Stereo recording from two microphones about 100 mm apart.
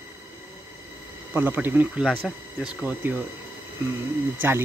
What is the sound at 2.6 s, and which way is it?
Speech, 15° right (ahead or behind).